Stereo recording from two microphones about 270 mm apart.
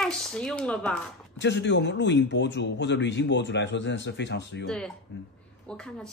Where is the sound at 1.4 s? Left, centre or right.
Left.